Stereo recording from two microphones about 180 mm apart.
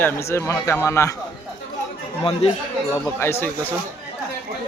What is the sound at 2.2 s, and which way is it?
Speech, 30° left (ahead or behind).